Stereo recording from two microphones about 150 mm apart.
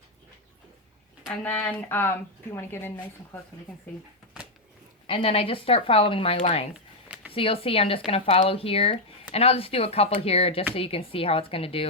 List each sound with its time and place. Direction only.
1.3 s speech: 10° left (ahead or behind)
5.0 s speech: 40° left (ahead or behind)
6.7 s a sound: 10° right (ahead or behind)
7.3 s speech: 40° left (ahead or behind)